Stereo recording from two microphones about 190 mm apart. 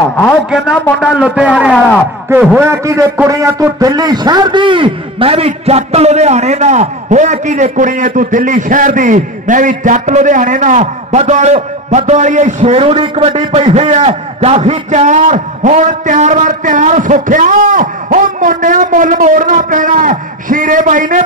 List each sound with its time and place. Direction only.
0.5 s a man's voice: 5° right (ahead or behind); by 21.2 s 45° right (ahead or behind)